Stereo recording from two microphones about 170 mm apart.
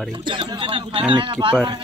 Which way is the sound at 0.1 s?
30° right (ahead or behind).